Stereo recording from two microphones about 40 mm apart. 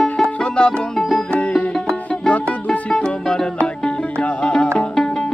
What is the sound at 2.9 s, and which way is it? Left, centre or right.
Music, left.